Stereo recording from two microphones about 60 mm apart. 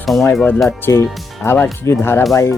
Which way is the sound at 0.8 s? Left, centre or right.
Left.